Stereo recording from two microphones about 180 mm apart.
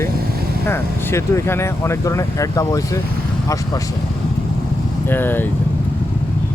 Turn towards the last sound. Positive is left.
turn(degrees=10)  # may be behind; listen again after turning